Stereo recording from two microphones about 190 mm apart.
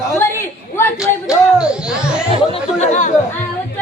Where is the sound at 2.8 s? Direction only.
40° left (ahead or behind).